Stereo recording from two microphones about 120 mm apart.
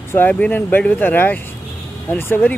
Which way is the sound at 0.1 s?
15° left (ahead or behind).